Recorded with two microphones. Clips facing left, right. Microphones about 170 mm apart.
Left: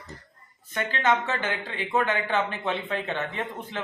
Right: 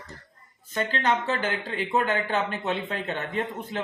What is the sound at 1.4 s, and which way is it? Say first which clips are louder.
Speech: right 2 dB; 40° right (ahead or behind).